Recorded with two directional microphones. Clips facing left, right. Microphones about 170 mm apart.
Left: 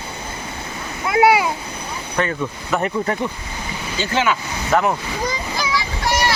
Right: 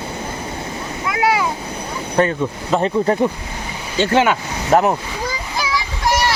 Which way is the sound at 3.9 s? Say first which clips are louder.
Right 5 dB; 55° right (ahead or behind).